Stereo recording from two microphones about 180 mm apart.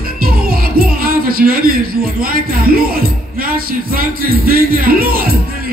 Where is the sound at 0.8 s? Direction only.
55° right (ahead or behind).